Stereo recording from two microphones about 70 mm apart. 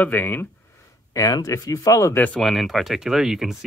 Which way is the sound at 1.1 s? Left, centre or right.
Left.